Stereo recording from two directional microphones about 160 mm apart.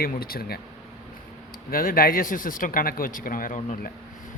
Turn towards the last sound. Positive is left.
turn(degrees=55)  # may be behind; listen again after turning